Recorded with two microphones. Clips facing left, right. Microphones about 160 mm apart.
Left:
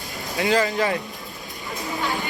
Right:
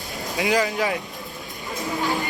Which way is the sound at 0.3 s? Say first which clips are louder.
Left 1 dB; 15° right (ahead or behind).